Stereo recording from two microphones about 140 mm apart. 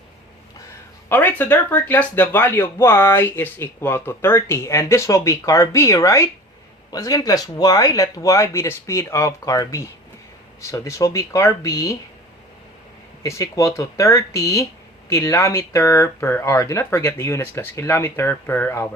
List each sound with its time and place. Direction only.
1.1 s speech: 10° left (ahead or behind)
13.2 s speech: 20° left (ahead or behind)